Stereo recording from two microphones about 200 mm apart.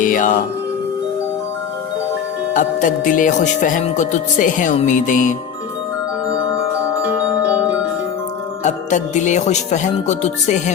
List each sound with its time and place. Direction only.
0.0 s speech: 40° left (ahead or behind)
2.5 s speech: 40° left (ahead or behind)
7.5 s music: 5° right (ahead or behind)
8.6 s speech: 35° left (ahead or behind)